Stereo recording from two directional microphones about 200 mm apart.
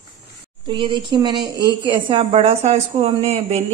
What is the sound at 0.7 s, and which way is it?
A woman's voice, 25° right (ahead or behind).